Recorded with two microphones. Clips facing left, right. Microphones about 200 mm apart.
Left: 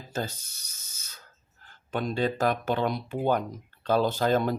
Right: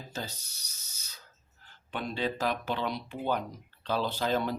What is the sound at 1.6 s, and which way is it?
Speech, 45° left (ahead or behind).